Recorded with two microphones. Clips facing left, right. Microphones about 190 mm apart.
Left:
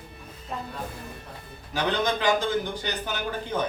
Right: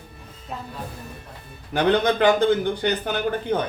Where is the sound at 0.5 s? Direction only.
5° right (ahead or behind).